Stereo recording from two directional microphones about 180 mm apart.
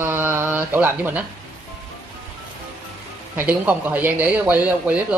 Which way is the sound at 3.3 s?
10° right (ahead or behind).